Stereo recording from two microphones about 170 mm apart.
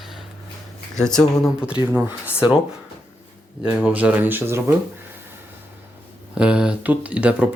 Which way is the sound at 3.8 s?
10° right (ahead or behind).